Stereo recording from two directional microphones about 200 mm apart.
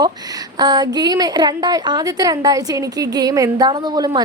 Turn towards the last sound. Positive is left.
turn(degrees=-20)  # may be behind; listen again after turning